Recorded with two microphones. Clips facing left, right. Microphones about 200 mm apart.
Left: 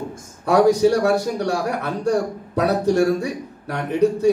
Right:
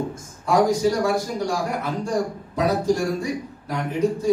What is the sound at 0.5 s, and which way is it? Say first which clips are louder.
Speech: left 4 dB; 65° left (ahead or behind).